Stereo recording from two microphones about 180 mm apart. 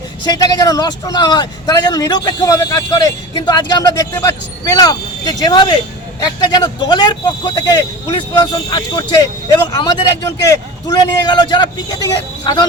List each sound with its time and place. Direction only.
0.3 s a man's voice: 20° left (ahead or behind)